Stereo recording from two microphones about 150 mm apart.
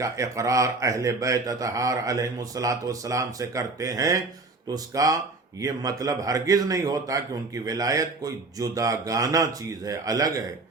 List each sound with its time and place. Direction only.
0.0 s speech: 20° right (ahead or behind)